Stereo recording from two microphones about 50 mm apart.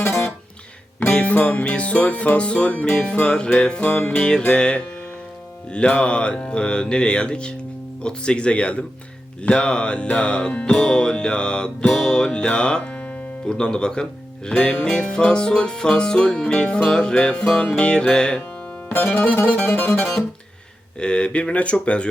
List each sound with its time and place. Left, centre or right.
0.0 s music: left
1.1 s music: left
1.7 s speech: left
2.9 s music: centre
3.3 s speech: centre
3.8 s music: left
4.2 s music: centre
5.7 s speech: left
10.7 s music: centre
13.4 s speech: centre
14.8 s music: centre
19.1 s music: left
21.0 s speech: centre